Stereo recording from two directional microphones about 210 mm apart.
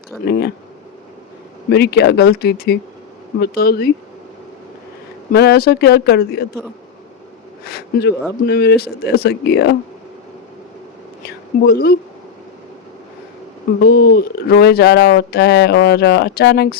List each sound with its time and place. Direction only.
0.3 s speech: 50° left (ahead or behind)
1.7 s speech: 50° left (ahead or behind)
5.3 s speech: 50° left (ahead or behind)
7.6 s speech: 50° left (ahead or behind)
11.3 s speech: 50° left (ahead or behind)
13.8 s speech: 50° left (ahead or behind)